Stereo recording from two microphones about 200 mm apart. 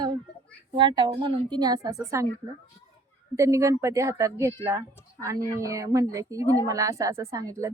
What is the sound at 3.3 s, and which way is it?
A woman's voice, 15° right (ahead or behind).